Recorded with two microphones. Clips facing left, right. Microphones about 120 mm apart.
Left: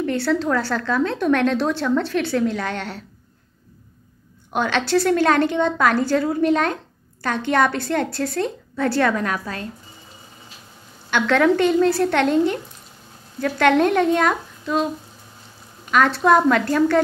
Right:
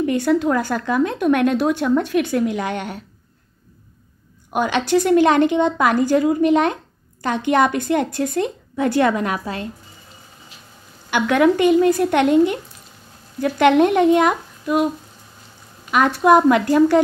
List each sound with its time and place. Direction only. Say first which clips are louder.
0.0 s a woman's voice: right 3 dB; 15° right (ahead or behind)
4.5 s a woman's voice: right 2 dB; 10° right (ahead or behind)
11.1 s a woman's voice: right 1 dB; 10° right (ahead or behind)
15.9 s a woman's voice: right 2 dB; 10° right (ahead or behind)